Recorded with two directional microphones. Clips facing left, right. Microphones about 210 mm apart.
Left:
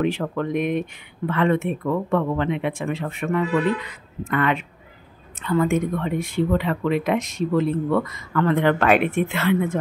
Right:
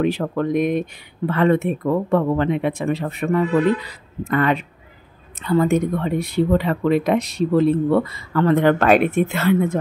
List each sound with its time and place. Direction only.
0.0 s speech: 40° right (ahead or behind)